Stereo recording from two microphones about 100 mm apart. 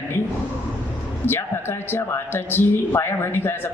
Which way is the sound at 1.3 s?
25° left (ahead or behind).